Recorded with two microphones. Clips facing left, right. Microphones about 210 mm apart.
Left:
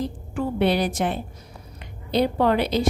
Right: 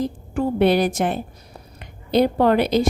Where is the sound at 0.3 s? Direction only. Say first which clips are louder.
Right 4 dB; 50° right (ahead or behind).